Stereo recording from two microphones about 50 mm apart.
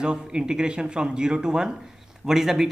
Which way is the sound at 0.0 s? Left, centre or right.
Centre.